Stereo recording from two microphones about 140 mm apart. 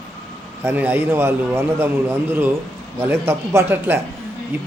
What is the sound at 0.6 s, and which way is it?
A man's voice, 15° right (ahead or behind).